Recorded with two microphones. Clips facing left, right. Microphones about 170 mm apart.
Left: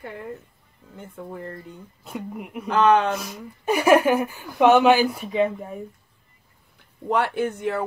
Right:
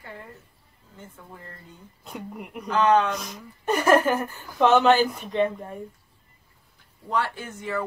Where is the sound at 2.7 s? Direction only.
60° left (ahead or behind).